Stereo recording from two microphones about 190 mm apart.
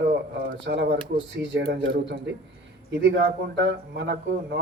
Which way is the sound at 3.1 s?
65° right (ahead or behind).